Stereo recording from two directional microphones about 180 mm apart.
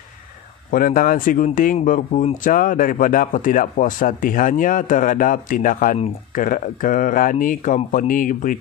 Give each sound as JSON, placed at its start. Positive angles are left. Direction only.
{"t": 0.7, "sound": "speech", "side_deg": 50}